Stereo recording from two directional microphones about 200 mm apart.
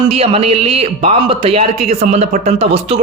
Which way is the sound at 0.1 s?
30° right (ahead or behind).